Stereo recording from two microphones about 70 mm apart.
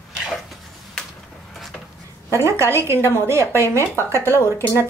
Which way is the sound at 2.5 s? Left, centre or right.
Right.